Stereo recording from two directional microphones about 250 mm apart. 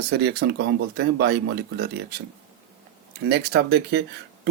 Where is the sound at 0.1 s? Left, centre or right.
Right.